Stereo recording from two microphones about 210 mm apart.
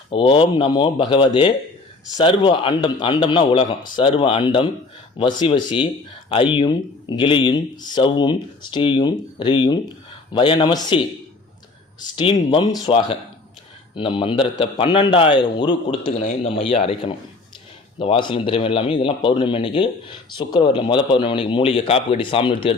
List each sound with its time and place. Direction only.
0.1 s speech: 25° left (ahead or behind)